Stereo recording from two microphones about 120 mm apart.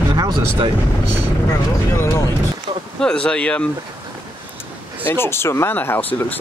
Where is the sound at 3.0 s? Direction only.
5° left (ahead or behind).